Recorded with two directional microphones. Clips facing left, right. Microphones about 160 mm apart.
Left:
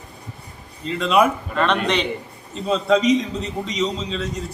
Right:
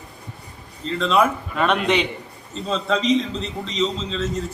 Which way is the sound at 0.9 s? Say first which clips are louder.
Left 1 dB; 10° left (ahead or behind).